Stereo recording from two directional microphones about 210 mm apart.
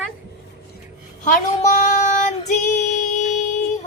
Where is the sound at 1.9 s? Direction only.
35° left (ahead or behind).